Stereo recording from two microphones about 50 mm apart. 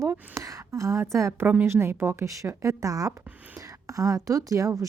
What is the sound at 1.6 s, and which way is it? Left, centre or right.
Speech, right.